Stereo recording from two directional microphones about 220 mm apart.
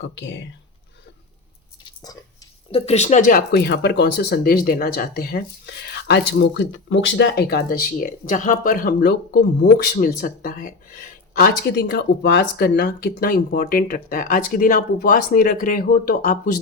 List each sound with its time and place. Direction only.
0.0 s speech: 55° left (ahead or behind)
2.7 s speech: 30° left (ahead or behind)